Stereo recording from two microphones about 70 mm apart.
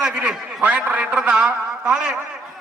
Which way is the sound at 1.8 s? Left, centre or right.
Centre.